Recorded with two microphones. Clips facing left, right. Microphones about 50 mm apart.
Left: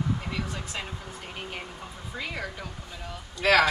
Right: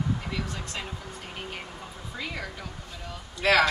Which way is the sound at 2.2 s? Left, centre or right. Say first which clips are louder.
Left 1 dB; centre.